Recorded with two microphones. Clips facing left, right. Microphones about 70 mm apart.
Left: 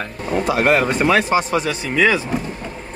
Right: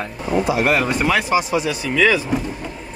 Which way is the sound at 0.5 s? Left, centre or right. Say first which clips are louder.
Left 5 dB; left.